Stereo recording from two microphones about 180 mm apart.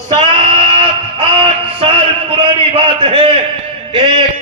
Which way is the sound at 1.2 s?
30° right (ahead or behind).